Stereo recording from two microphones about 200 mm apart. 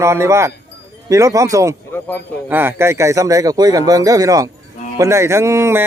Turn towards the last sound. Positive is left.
turn(degrees=-10)  # may be behind; listen again after turning